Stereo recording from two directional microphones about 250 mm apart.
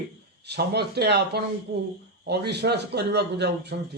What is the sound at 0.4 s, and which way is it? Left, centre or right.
A man's voice, right.